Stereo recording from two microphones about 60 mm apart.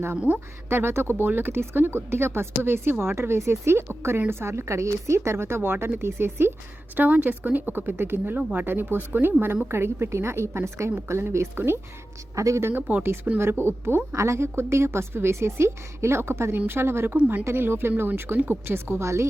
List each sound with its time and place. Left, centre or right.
0.3 s speech: right
0.7 s a woman's voice: right
6.9 s a woman's voice: right
12.4 s speech: right
12.6 s a woman's voice: right
17.2 s speech: right
17.4 s a woman's voice: right